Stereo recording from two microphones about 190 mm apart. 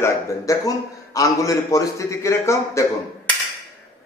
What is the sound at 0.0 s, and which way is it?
A man's voice, 20° left (ahead or behind).